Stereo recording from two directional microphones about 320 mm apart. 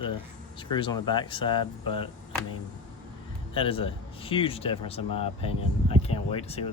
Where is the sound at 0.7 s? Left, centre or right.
Centre.